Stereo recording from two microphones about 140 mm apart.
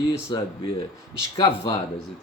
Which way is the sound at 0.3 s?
35° left (ahead or behind).